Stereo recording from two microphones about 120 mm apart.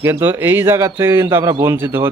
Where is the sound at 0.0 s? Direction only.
20° right (ahead or behind).